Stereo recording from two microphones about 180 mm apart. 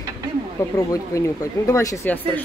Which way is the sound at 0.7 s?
20° left (ahead or behind).